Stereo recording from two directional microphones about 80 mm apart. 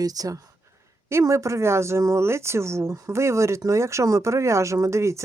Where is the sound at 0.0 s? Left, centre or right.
Right.